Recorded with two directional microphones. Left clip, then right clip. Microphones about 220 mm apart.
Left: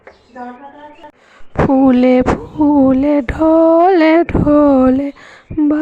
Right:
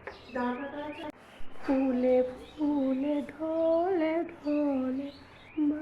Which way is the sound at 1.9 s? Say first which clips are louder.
Left 15 dB; 60° left (ahead or behind).